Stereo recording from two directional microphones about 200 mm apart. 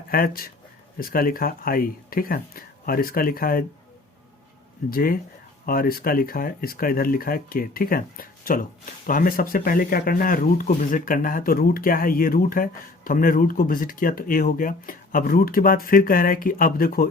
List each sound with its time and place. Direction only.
0.1 s speech: 45° left (ahead or behind)
4.9 s speech: 45° left (ahead or behind)